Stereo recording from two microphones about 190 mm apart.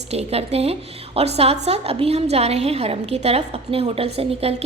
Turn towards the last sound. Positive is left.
turn(degrees=-30)  # may be behind; listen again after turning